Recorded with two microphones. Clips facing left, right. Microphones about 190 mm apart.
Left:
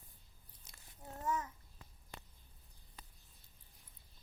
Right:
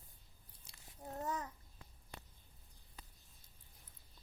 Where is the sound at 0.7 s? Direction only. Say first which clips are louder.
Right 4 dB; 35° right (ahead or behind).